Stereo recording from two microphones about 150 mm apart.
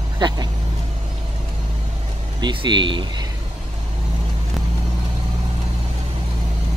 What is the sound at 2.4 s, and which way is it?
Speech, 30° right (ahead or behind).